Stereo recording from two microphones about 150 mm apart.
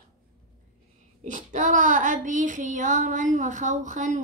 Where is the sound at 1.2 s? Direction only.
55° right (ahead or behind).